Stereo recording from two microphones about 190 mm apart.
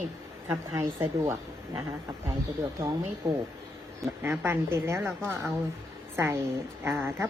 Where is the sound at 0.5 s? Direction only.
15° right (ahead or behind).